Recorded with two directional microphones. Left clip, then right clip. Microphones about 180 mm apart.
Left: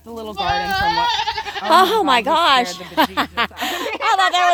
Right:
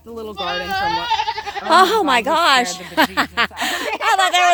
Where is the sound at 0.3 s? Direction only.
60° left (ahead or behind).